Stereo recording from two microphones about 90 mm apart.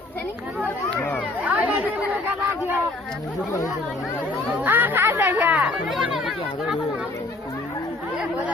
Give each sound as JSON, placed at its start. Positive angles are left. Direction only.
{"t": 0.9, "sound": "speech", "side_deg": 20}
{"t": 1.5, "sound": "chatter", "side_deg": -20}
{"t": 4.6, "sound": "speech", "side_deg": -20}
{"t": 5.9, "sound": "speech", "side_deg": 0}